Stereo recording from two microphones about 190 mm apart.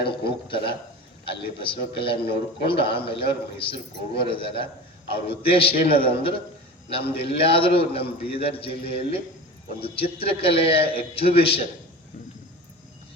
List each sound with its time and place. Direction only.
0.0 s a man's voice: 25° left (ahead or behind)